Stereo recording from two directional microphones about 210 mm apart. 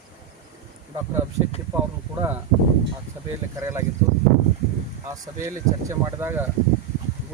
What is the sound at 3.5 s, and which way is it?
Speech, 10° right (ahead or behind).